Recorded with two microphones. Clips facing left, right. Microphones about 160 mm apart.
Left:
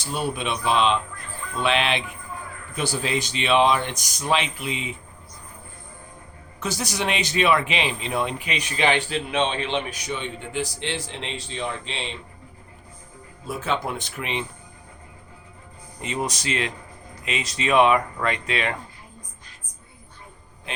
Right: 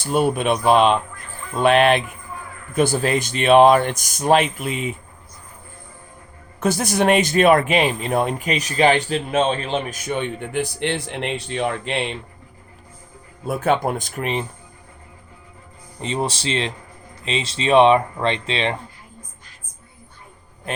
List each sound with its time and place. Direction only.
0.0 s speech: 50° right (ahead or behind)
6.6 s speech: 50° right (ahead or behind)
13.5 s speech: 55° right (ahead or behind)
16.0 s speech: 30° right (ahead or behind)